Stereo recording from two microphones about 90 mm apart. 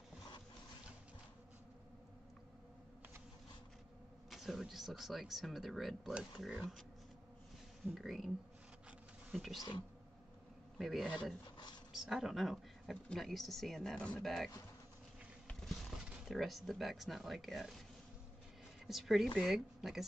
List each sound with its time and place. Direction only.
4.3 s speech: centre (ahead or behind)
7.8 s speech: centre (ahead or behind)
9.3 s speech: centre (ahead or behind)
10.8 s a man's voice: centre (ahead or behind)
11.4 s a sound: 55° left (ahead or behind)
11.9 s speech: 5° right (ahead or behind)
16.3 s speech: centre (ahead or behind)
18.9 s speech: centre (ahead or behind)